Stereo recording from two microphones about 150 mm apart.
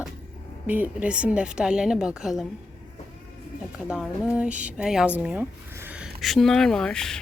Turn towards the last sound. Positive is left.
turn(degrees=5)  # may be behind; listen again after turning